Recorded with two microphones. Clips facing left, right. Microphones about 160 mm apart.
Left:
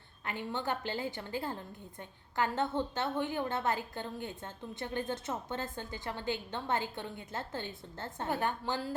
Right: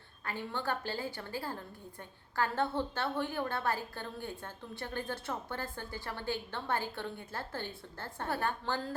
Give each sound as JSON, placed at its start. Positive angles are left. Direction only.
{"t": 0.3, "sound": "a woman's voice", "side_deg": 20}